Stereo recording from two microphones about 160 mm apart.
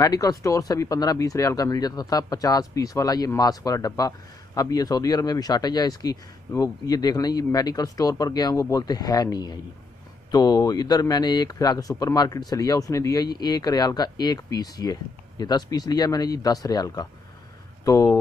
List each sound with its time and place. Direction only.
0.0 s speech: 25° left (ahead or behind)